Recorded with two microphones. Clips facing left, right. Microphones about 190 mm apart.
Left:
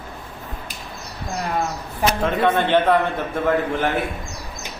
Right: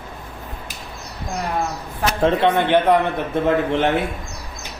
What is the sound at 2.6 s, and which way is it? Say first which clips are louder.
A man's voice: right 1 dB; 15° right (ahead or behind).